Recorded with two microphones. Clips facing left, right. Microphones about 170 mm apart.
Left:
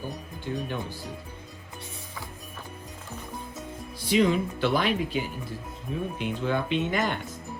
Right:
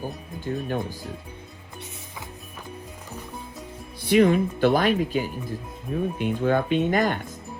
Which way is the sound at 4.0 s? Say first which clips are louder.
Right 5 dB; 55° right (ahead or behind).